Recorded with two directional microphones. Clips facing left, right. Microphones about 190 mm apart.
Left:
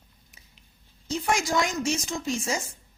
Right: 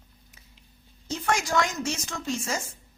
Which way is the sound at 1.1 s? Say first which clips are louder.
Even; 15° left (ahead or behind).